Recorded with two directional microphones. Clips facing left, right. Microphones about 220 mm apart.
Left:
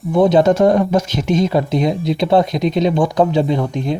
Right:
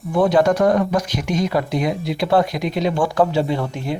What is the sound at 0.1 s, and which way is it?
A man's voice, 20° left (ahead or behind).